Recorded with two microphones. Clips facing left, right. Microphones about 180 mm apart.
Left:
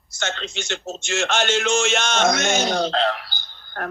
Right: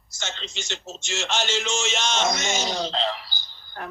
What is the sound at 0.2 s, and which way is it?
Speech, 55° left (ahead or behind).